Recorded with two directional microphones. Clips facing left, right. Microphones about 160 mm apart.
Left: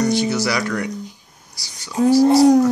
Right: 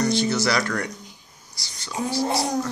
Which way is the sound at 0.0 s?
15° left (ahead or behind).